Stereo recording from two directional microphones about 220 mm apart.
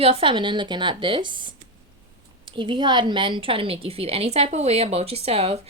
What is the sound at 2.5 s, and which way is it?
Speech, 20° right (ahead or behind).